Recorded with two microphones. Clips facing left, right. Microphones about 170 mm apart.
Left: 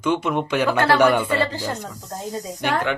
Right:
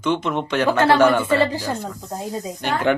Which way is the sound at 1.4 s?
15° right (ahead or behind).